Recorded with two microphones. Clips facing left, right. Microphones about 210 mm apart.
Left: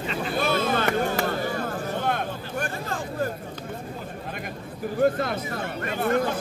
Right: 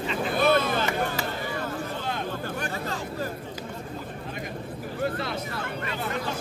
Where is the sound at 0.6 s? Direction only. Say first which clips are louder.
Left 3 dB; 50° left (ahead or behind).